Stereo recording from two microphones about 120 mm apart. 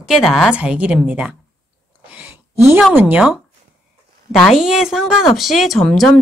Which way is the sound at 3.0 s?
15° right (ahead or behind).